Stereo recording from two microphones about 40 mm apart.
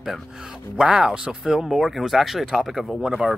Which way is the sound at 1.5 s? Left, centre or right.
Centre.